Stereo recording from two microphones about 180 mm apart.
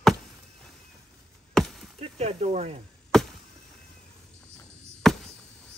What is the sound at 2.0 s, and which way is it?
Speech, 35° right (ahead or behind).